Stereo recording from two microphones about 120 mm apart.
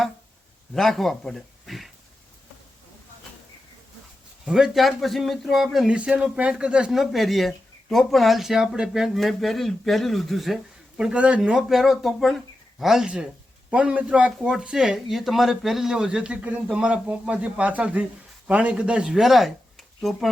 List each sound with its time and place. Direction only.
0.7 s speech: 5° left (ahead or behind)
4.4 s speech: 5° right (ahead or behind)